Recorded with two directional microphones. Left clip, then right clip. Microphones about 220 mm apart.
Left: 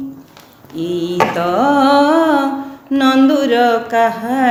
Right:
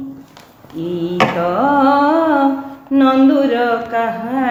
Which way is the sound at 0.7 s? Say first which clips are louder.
Left 1 dB; 50° left (ahead or behind).